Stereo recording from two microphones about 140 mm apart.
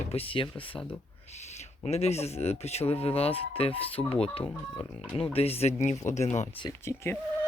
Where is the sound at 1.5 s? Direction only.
50° left (ahead or behind).